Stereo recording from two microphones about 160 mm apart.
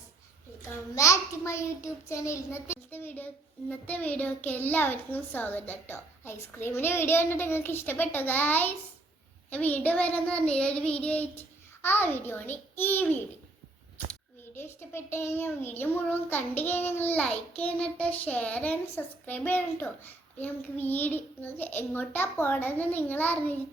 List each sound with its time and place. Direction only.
0.9 s a child's voice: 20° left (ahead or behind)